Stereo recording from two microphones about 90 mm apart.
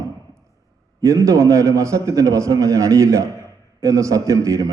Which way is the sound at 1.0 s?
35° right (ahead or behind).